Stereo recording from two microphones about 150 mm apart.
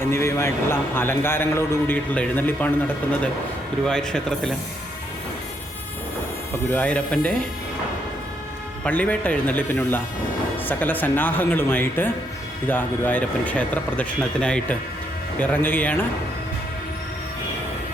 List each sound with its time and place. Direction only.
0.0 s a man's voice: 15° left (ahead or behind)
3.8 s speech: 5° left (ahead or behind)
6.7 s a man's voice: 10° left (ahead or behind)
8.8 s a man's voice: 10° left (ahead or behind)